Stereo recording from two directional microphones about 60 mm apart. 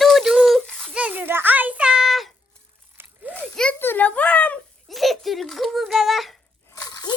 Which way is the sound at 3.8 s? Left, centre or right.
Left.